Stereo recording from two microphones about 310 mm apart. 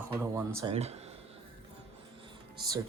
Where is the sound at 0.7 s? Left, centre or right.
Centre.